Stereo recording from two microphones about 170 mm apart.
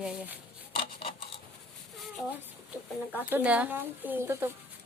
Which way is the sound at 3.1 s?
10° right (ahead or behind).